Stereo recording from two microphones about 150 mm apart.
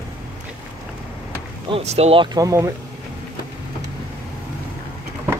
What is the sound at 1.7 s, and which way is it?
Speech, 45° right (ahead or behind).